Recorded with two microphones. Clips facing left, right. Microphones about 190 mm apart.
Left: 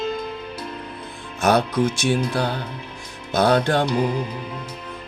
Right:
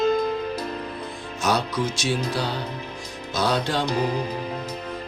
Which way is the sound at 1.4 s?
55° left (ahead or behind).